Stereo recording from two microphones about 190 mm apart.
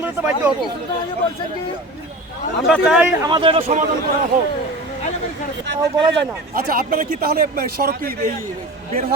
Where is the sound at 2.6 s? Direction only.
Centre (ahead or behind).